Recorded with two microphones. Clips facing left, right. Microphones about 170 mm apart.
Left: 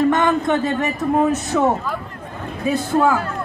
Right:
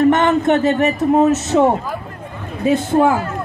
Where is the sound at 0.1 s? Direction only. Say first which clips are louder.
Right 3 dB; 25° right (ahead or behind).